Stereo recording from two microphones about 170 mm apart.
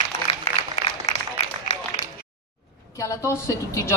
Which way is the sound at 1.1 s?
40° left (ahead or behind).